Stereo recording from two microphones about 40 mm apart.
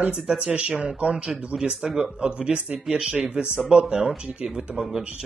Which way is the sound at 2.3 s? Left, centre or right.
Right.